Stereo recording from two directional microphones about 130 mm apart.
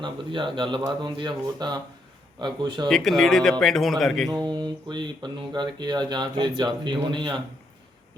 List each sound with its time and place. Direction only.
0.0 s speech: 40° right (ahead or behind)
2.9 s a man's voice: centre (ahead or behind)
4.3 s speech: 35° right (ahead or behind)